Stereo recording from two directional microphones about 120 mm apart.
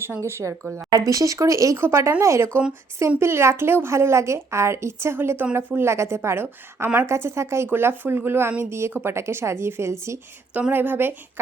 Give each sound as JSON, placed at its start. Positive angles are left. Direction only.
{"t": 0.0, "sound": "a woman's voice", "side_deg": -20}